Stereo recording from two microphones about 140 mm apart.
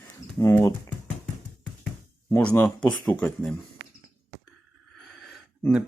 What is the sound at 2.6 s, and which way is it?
Speech, 10° left (ahead or behind).